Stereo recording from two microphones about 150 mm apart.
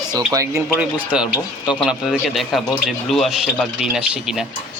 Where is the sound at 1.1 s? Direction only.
5° right (ahead or behind).